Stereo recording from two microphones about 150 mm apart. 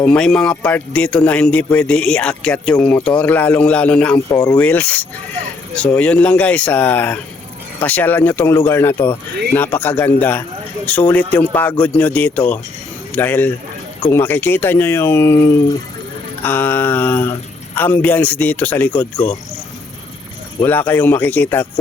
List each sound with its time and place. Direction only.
0.0 s a man's voice: 5° left (ahead or behind)
4.3 s speech: 25° left (ahead or behind)
4.5 s speech: 10° left (ahead or behind)
20.6 s speech: 15° left (ahead or behind)